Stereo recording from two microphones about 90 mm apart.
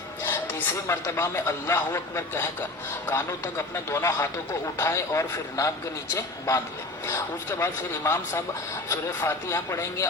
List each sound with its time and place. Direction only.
0.2 s a sound: 20° left (ahead or behind)
0.9 s speech: 30° left (ahead or behind)
7.6 s speech: 25° left (ahead or behind)